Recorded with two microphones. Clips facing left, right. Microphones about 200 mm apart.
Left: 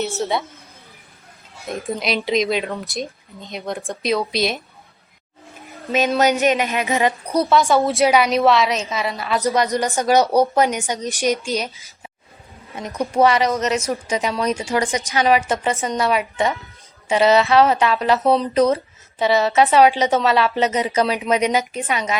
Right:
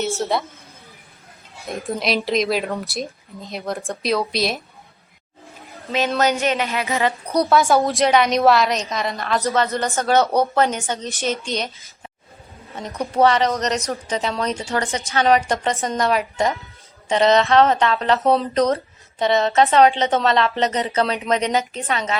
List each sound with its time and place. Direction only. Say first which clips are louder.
0.0 s speech: even; centre (ahead or behind)
1.6 s speech: even; centre (ahead or behind)
6.1 s a woman's voice: left 3 dB; 15° left (ahead or behind)
7.3 s a woman's voice: even; centre (ahead or behind)
13.1 s a woman's voice: even; 10° left (ahead or behind)
13.9 s a woman's voice: left 2 dB; 15° left (ahead or behind)